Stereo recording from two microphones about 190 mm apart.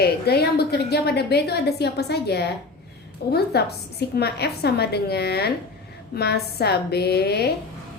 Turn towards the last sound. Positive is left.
turn(degrees=60)  # may be behind; listen again after turning